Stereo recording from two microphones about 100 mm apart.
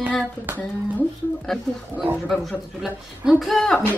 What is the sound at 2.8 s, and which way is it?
Speech, centre (ahead or behind).